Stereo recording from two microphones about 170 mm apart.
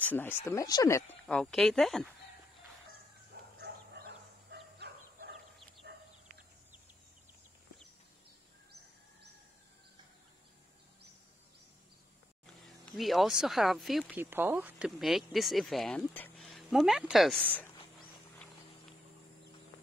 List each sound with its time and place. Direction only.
0.0 s speech: 10° left (ahead or behind)
1.2 s speech: centre (ahead or behind)
3.5 s fowl: 70° right (ahead or behind)
5.9 s bird: 70° right (ahead or behind)
12.6 s speech: centre (ahead or behind)
14.1 s speech: 10° right (ahead or behind); by 17.6 s 10° left (ahead or behind)